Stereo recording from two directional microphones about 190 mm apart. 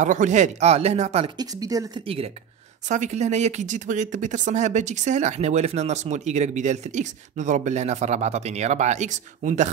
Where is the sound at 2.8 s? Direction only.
40° right (ahead or behind).